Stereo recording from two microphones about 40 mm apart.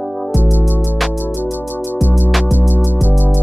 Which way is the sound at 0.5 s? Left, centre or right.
Left.